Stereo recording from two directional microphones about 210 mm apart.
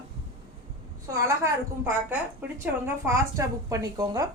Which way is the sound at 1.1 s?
15° right (ahead or behind).